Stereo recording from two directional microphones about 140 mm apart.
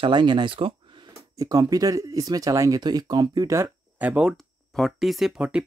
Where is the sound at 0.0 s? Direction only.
30° right (ahead or behind).